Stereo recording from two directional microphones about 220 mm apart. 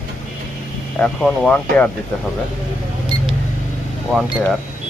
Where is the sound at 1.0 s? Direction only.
5° left (ahead or behind).